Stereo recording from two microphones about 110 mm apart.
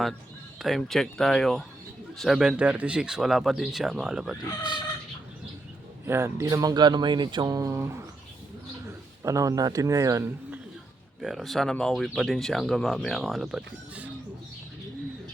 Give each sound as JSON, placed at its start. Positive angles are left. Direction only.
{"t": 0.6, "sound": "speech", "side_deg": 0}
{"t": 6.1, "sound": "speech", "side_deg": -25}
{"t": 9.2, "sound": "speech", "side_deg": -30}
{"t": 11.2, "sound": "speech", "side_deg": -5}